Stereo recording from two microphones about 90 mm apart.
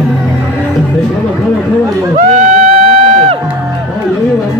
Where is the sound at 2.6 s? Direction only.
90° right.